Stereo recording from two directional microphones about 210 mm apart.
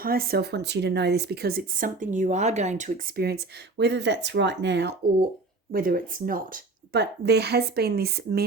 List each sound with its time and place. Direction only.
0.0 s speech: 45° right (ahead or behind)
3.2 s speech: 50° right (ahead or behind)
5.7 s speech: 45° right (ahead or behind)